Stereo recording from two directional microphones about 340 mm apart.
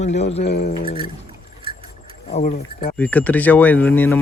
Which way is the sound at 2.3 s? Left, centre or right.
Centre.